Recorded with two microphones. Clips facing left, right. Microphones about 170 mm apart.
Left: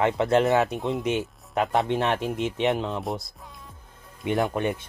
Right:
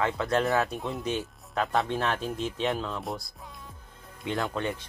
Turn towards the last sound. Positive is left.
turn(degrees=15)  # may be behind; listen again after turning